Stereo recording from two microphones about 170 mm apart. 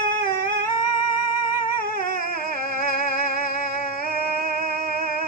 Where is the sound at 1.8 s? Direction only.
55° left (ahead or behind).